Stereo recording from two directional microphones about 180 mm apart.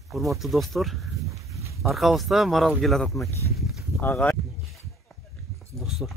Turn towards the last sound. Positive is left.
turn(degrees=0)  # may be behind; listen again after turning